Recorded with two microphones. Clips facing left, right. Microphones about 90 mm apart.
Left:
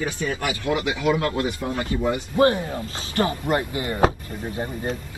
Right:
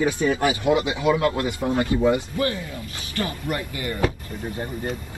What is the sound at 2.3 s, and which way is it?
A man's voice, 25° left (ahead or behind).